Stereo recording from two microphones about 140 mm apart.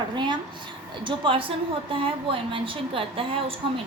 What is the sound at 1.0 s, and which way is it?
A woman's voice, 35° right (ahead or behind).